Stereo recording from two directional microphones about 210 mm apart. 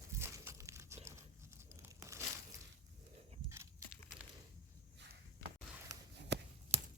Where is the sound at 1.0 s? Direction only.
10° right (ahead or behind).